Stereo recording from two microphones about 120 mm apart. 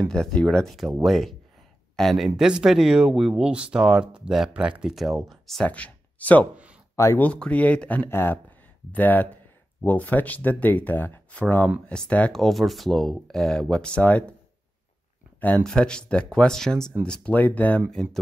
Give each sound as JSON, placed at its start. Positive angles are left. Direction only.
{"t": 0.1, "sound": "speech", "side_deg": 5}
{"t": 6.5, "sound": "a sound", "side_deg": -10}
{"t": 7.0, "sound": "speech", "side_deg": 25}
{"t": 7.2, "sound": "speech", "side_deg": 10}
{"t": 15.4, "sound": "speech", "side_deg": 10}